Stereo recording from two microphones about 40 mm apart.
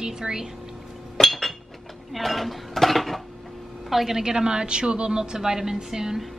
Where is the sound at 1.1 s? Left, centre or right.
Centre.